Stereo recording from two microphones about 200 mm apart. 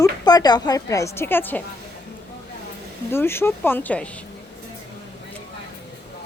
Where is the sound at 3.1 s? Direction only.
10° left (ahead or behind).